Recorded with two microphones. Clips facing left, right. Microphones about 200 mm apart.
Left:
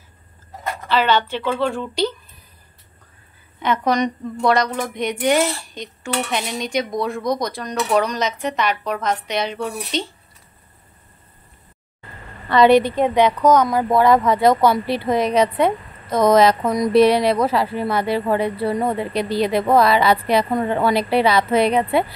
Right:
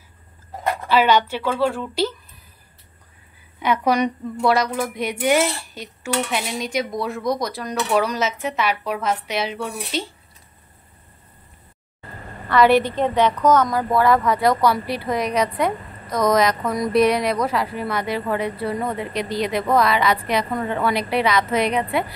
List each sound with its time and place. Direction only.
0.8 s speech: 10° right (ahead or behind)
3.5 s speech: 10° right (ahead or behind)
12.4 s a woman's voice: 20° left (ahead or behind)